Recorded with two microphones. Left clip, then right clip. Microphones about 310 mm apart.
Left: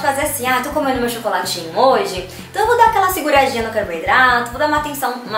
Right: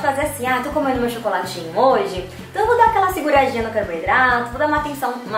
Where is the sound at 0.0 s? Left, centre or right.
Centre.